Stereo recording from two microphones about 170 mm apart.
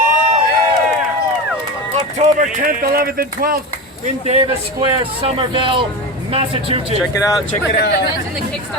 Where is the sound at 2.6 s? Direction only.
60° right (ahead or behind).